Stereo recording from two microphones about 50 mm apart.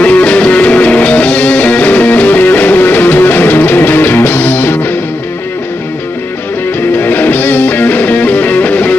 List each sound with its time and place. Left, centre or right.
0.0 s music: left
7.0 s music: left